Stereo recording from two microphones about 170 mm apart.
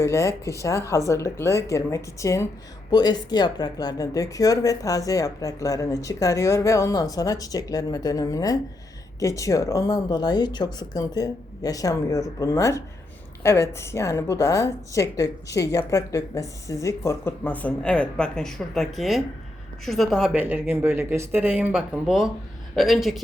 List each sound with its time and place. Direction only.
0.0 s a woman's voice: 15° left (ahead or behind); by 23.2 s centre (ahead or behind)